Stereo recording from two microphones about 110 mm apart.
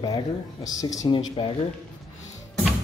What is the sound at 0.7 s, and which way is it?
Speech, 30° left (ahead or behind).